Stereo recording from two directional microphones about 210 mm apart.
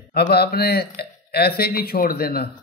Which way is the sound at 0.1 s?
50° left (ahead or behind).